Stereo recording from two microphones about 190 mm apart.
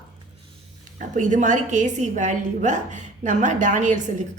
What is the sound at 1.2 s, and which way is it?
A woman's voice, 40° right (ahead or behind).